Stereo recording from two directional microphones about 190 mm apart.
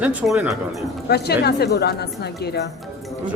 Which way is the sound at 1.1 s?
60° left (ahead or behind).